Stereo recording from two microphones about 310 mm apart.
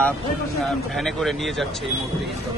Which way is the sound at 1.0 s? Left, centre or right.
Centre.